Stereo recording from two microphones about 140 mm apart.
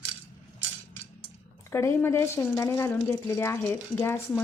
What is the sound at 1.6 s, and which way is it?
Speech, 20° left (ahead or behind).